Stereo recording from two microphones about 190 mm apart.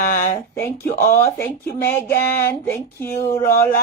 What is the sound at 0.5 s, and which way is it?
Speech, 15° left (ahead or behind).